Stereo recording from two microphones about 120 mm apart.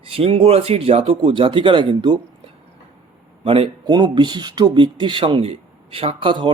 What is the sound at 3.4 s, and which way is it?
Speech, 50° right (ahead or behind).